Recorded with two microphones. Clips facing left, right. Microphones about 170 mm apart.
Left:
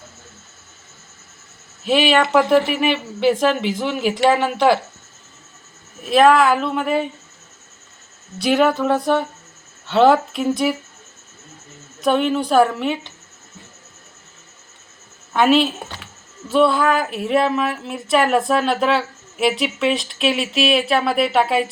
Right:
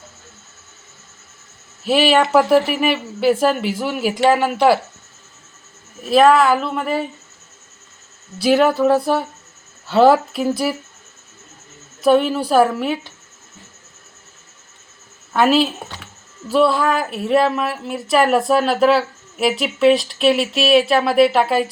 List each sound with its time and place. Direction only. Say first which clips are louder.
1.9 s speech: right 1 dB; 5° right (ahead or behind)
6.1 s speech: right 1 dB; centre (ahead or behind)
8.4 s speech: right 2 dB; centre (ahead or behind)
12.0 s speech: right 3 dB; 5° right (ahead or behind)
15.3 s a woman's voice: even; centre (ahead or behind)